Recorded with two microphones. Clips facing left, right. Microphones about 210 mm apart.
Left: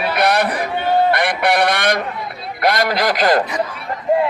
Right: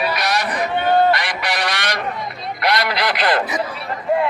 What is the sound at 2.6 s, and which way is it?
Radio, 45° left (ahead or behind).